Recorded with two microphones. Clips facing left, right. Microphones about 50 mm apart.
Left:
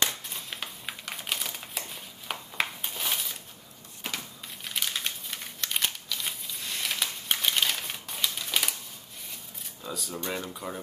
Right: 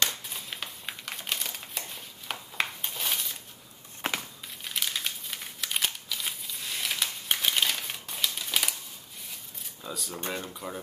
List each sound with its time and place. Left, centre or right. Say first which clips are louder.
0.3 s crumpling: even; centre
4.0 s crushing: right 5 dB; right
4.6 s crumpling: even; centre
9.8 s speech: left 1 dB; centre